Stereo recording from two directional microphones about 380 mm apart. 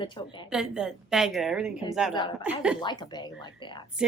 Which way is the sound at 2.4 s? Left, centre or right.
Centre.